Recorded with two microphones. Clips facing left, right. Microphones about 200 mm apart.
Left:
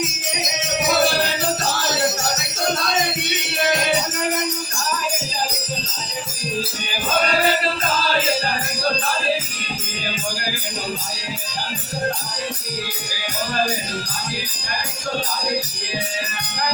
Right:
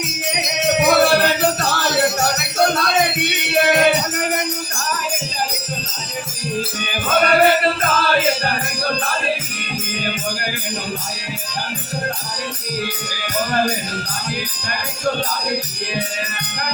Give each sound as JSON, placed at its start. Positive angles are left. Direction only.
{"t": 0.0, "sound": "music", "side_deg": -60}
{"t": 6.9, "sound": "music", "side_deg": -60}
{"t": 13.5, "sound": "speech", "side_deg": -60}